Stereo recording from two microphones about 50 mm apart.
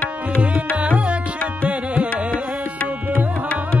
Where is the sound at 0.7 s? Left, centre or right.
Right.